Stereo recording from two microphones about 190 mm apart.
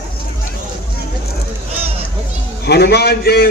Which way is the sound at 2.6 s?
60° left (ahead or behind).